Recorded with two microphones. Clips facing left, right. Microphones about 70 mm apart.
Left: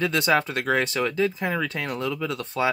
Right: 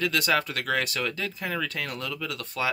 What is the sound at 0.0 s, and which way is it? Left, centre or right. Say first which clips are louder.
Speech: left 3 dB; left.